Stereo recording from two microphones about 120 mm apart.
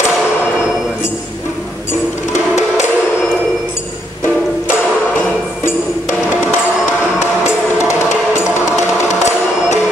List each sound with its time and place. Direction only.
8.7 s music: 75° left (ahead or behind)